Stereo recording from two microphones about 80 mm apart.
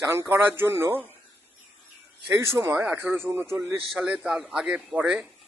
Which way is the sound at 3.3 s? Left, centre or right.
Right.